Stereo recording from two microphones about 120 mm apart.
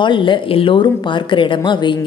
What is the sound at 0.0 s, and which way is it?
A woman's voice, 45° left (ahead or behind).